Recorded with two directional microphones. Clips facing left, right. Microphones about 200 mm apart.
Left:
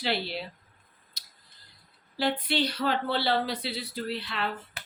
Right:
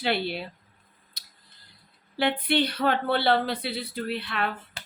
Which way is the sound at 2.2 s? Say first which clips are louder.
Right 3 dB; 60° right (ahead or behind).